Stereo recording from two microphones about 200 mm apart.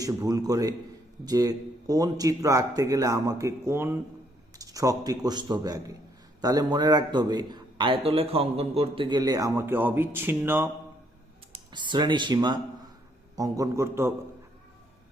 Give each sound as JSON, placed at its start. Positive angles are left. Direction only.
{"t": 0.0, "sound": "a man's voice", "side_deg": -15}
{"t": 11.5, "sound": "a man's voice", "side_deg": -25}